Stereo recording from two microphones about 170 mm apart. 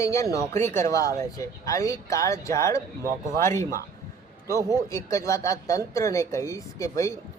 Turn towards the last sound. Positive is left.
turn(degrees=20)  # may be behind; listen again after turning